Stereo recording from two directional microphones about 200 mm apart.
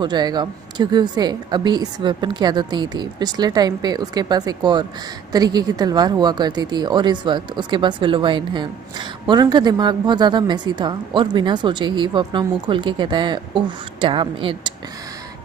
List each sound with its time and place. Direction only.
0.0 s a woman's voice: 20° right (ahead or behind)